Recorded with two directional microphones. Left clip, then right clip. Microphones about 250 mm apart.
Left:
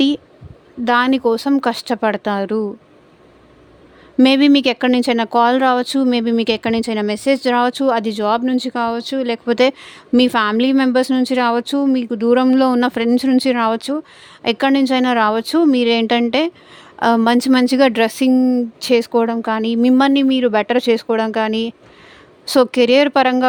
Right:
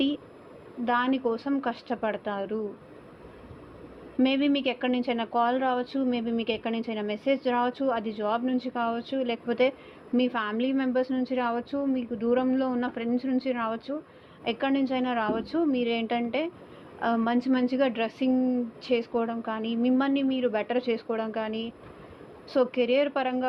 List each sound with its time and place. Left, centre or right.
0.9 s speech: left
4.2 s a woman's voice: left